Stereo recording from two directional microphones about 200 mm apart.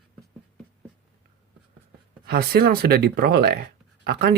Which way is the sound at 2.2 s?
50° right (ahead or behind).